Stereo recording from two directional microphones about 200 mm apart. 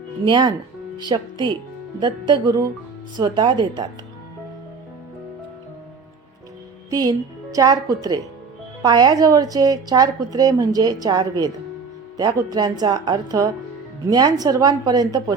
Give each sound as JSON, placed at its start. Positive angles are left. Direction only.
{"t": 0.3, "sound": "a woman's voice", "side_deg": -25}
{"t": 6.9, "sound": "a woman's voice", "side_deg": -20}